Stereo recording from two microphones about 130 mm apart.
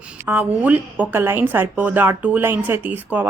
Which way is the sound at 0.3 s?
10° right (ahead or behind).